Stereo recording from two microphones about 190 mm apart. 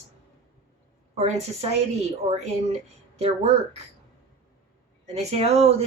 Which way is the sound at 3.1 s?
35° right (ahead or behind).